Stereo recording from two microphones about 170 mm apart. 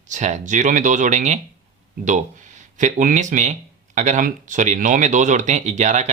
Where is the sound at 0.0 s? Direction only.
45° right (ahead or behind).